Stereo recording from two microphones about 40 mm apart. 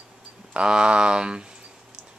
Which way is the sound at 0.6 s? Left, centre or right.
Right.